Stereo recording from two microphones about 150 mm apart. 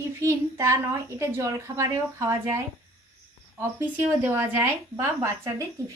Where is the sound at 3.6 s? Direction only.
15° right (ahead or behind).